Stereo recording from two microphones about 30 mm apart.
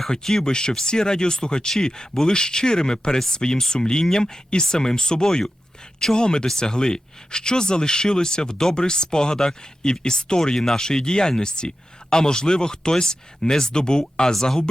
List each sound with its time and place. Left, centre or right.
0.1 s speech: centre
0.4 s speech: left